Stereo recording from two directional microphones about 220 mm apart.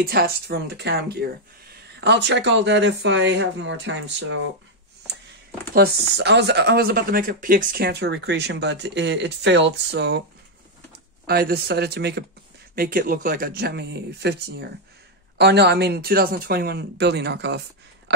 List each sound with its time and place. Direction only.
0.0 s speech: 45° right (ahead or behind)
5.7 s speech: 45° right (ahead or behind)
11.2 s speech: 45° right (ahead or behind)